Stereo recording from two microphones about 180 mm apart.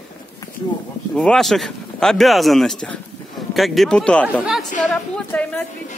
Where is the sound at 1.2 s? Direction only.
5° left (ahead or behind).